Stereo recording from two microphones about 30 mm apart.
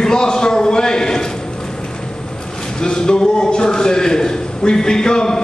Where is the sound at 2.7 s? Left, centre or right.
Left.